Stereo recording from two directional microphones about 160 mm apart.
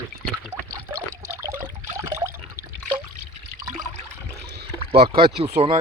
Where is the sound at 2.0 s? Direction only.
15° right (ahead or behind).